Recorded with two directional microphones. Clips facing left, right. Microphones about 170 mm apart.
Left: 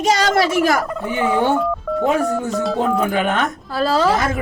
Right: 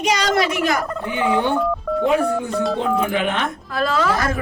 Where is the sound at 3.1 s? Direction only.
45° left (ahead or behind).